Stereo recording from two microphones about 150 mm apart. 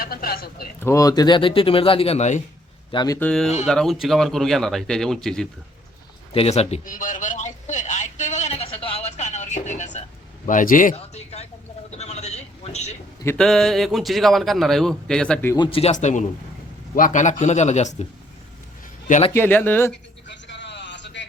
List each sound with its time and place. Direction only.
0.0 s speech: 90° left
0.8 s speech: 20° left (ahead or behind); by 2.4 s 50° left (ahead or behind)
2.9 s speech: 30° left (ahead or behind)
3.2 s a man's voice: 5° left (ahead or behind)
6.3 s speech: 45° left (ahead or behind)
6.8 s a man's voice: 65° left (ahead or behind)
10.9 s speech: 45° left (ahead or behind)
11.9 s a sound: 45° left (ahead or behind)
13.2 s a man's voice: 5° left (ahead or behind)
15.5 s speech: 30° left (ahead or behind)
15.8 s speech: 50° left (ahead or behind)
19.3 s speech: 15° left (ahead or behind)